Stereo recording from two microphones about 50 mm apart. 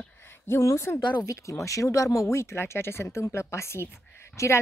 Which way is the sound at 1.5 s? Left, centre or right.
Left.